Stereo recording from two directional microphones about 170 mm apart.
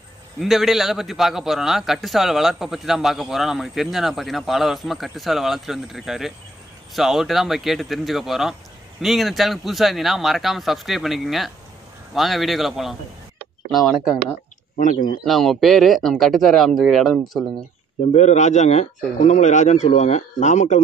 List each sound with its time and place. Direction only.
0.4 s a man's voice: centre (ahead or behind)
14.8 s speech: 50° left (ahead or behind)
15.2 s a man's voice: centre (ahead or behind)
18.1 s speech: 40° left (ahead or behind)